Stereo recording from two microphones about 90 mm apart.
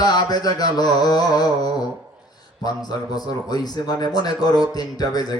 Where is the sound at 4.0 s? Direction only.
45° left (ahead or behind).